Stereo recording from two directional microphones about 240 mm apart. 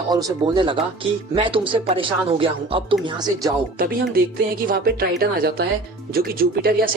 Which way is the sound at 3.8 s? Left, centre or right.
Right.